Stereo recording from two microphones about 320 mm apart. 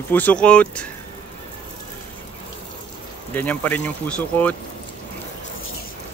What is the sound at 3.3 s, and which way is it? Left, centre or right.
Speech, centre.